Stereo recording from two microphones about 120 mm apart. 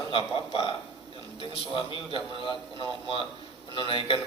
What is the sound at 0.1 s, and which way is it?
Speech, 45° left (ahead or behind).